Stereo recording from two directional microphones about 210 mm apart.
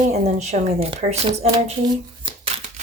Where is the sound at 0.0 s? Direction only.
35° right (ahead or behind).